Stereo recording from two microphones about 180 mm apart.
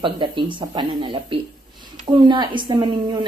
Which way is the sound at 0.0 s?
25° right (ahead or behind).